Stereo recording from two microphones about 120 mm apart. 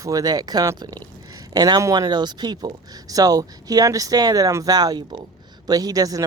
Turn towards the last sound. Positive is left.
turn(degrees=-30)  # may be behind; listen again after turning